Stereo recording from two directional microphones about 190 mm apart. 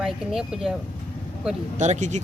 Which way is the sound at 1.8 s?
40° right (ahead or behind).